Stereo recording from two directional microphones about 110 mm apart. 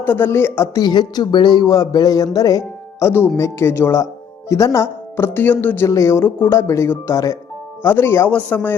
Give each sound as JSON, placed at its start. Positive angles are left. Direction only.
{"t": 0.0, "sound": "speech", "side_deg": 20}
{"t": 0.8, "sound": "speech", "side_deg": 40}